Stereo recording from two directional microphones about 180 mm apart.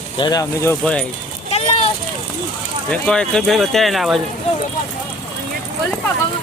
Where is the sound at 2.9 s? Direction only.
5° left (ahead or behind).